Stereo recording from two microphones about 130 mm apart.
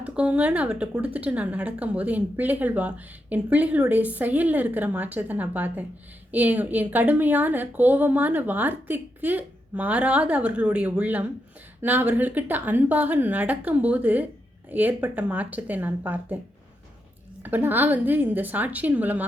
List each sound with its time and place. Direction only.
0.0 s a woman's voice: 10° right (ahead or behind)
17.4 s a woman's voice: 15° right (ahead or behind)